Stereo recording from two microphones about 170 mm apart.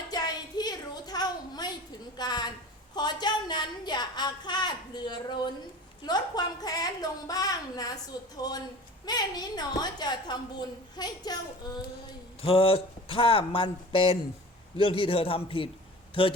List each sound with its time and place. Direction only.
0.1 s a sound: 25° left (ahead or behind)
2.9 s a woman's voice: 25° left (ahead or behind)
12.4 s speech: 35° left (ahead or behind)